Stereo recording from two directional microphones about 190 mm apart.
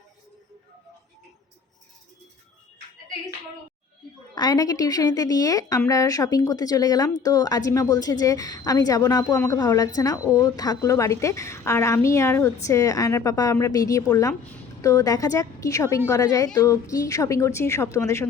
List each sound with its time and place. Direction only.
4.4 s a woman's voice: 20° left (ahead or behind)